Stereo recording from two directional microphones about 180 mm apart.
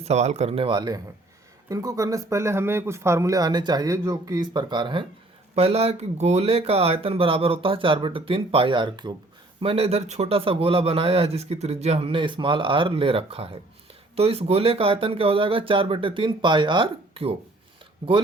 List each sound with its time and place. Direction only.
0.0 s a man's voice: 40° right (ahead or behind)